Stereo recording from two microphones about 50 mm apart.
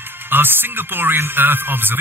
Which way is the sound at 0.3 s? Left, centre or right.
Right.